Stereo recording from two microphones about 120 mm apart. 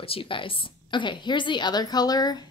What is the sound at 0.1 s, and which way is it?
A woman's voice, 45° left (ahead or behind).